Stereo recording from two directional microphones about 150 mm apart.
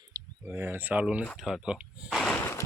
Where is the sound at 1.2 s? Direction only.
Centre (ahead or behind).